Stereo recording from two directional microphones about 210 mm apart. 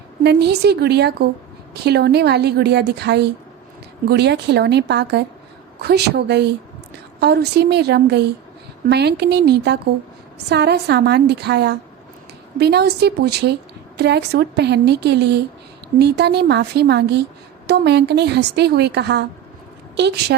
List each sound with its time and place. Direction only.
0.2 s a woman's voice: 50° right (ahead or behind)